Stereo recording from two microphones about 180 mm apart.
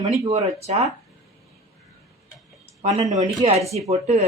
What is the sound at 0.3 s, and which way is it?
Speech, 40° right (ahead or behind).